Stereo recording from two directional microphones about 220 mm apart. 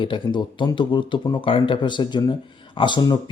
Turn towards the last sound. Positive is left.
turn(degrees=20)  # may be behind; listen again after turning